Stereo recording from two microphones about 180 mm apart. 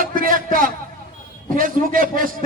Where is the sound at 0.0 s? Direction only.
50° right (ahead or behind).